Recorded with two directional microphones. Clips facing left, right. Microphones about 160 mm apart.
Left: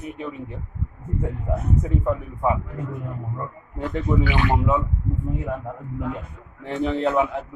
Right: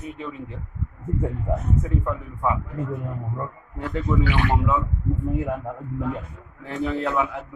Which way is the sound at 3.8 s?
20° left (ahead or behind).